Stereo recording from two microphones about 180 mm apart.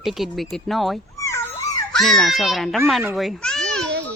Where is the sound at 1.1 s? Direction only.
15° left (ahead or behind).